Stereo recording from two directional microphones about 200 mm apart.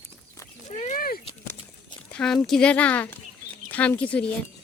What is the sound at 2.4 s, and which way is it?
Speech, 5° left (ahead or behind).